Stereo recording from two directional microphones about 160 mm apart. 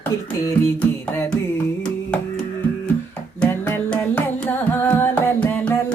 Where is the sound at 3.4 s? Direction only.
10° left (ahead or behind).